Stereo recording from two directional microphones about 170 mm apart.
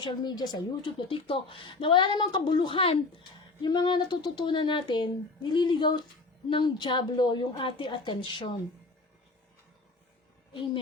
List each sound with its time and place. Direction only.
0.0 s a woman's voice: 25° left (ahead or behind)